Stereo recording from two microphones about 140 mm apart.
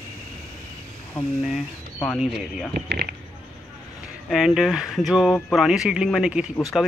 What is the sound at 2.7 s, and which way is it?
Speech, 90° right.